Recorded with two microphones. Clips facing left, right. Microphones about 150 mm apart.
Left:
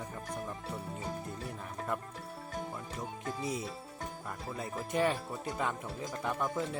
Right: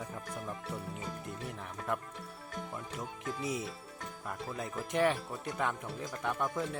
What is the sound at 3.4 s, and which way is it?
Speech, centre (ahead or behind).